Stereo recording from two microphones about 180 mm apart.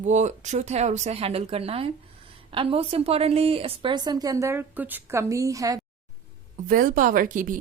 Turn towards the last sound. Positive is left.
turn(degrees=-45)  # may be behind; listen again after turning